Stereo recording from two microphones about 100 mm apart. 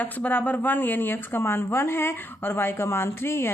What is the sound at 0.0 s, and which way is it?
Speech, 15° left (ahead or behind).